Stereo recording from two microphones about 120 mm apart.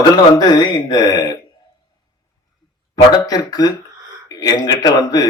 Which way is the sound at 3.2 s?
35° left (ahead or behind).